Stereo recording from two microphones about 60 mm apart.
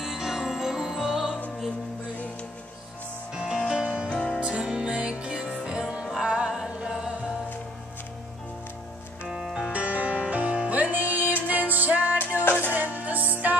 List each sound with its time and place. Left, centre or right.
0.0 s music: centre
3.5 s music: centre
3.8 s music: right
9.4 s music: centre
9.7 s music: right
12.2 s music: left
12.7 s music: right